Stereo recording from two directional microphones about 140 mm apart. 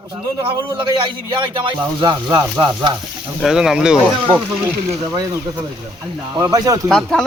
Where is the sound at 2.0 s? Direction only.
35° right (ahead or behind).